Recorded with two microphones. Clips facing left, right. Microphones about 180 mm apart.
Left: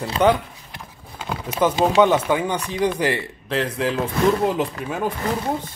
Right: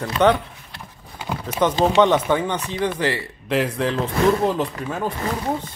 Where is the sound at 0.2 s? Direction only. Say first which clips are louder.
Even; 5° left (ahead or behind).